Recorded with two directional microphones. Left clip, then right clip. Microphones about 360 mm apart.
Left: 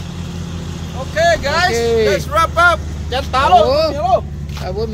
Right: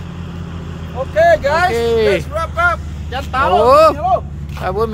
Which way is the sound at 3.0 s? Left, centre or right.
Left.